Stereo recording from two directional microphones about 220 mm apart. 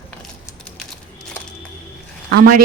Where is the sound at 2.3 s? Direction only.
40° right (ahead or behind).